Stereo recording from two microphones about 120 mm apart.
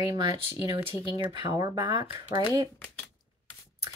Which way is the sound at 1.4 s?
35° right (ahead or behind).